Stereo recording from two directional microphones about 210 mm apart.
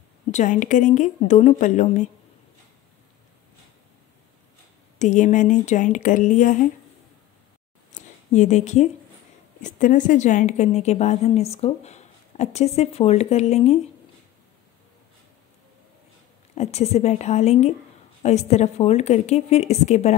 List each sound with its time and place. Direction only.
0.3 s a woman's voice: 35° left (ahead or behind)
4.9 s a woman's voice: 35° left (ahead or behind)
7.9 s a sound: 35° left (ahead or behind)
9.6 s a woman's voice: 35° left (ahead or behind)
16.5 s a woman's voice: 30° left (ahead or behind)